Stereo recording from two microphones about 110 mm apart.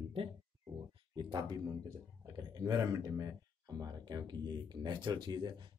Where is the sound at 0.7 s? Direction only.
40° right (ahead or behind).